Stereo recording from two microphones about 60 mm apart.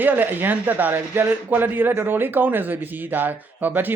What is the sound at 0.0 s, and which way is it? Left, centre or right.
Speech, right.